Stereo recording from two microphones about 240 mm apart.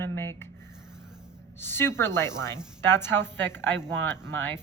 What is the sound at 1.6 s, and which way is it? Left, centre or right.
Speech, centre.